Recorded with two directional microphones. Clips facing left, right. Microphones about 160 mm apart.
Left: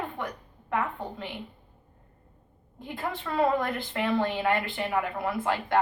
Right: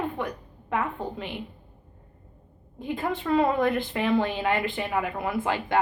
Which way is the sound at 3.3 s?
20° right (ahead or behind).